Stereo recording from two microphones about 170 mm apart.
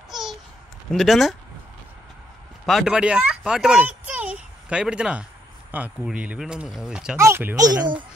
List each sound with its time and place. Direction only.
0.1 s babbling: centre (ahead or behind)
0.9 s speech: centre (ahead or behind)
2.6 s speech: centre (ahead or behind); by 8.0 s 25° right (ahead or behind)